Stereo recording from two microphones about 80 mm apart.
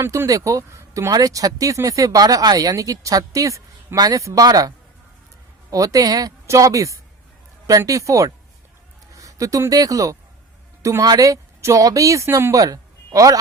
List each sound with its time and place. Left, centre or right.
0.0 s speech: right
0.3 s speech: right
5.7 s speech: right